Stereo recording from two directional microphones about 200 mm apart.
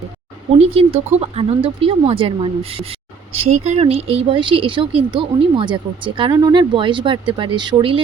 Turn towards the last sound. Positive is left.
turn(degrees=-25)  # may be behind; listen again after turning